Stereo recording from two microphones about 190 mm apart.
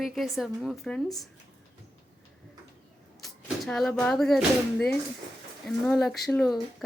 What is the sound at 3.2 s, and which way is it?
Speech, 5° left (ahead or behind).